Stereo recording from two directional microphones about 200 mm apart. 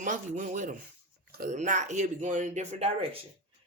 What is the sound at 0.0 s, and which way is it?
A woman's voice, 40° right (ahead or behind).